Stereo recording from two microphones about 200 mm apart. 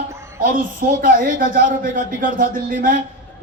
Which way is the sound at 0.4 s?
45° right (ahead or behind).